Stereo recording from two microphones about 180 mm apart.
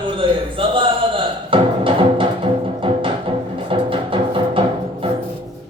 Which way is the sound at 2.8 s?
30° right (ahead or behind).